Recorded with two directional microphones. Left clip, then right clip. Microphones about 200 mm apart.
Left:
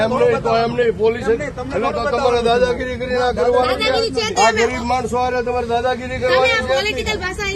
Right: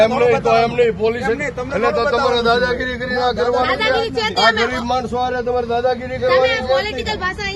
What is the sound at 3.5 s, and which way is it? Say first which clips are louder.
Speech: left 1 dB; 15° left (ahead or behind).